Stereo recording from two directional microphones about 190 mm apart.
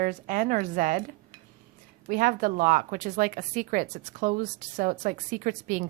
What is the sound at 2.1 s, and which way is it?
Speech, 45° right (ahead or behind).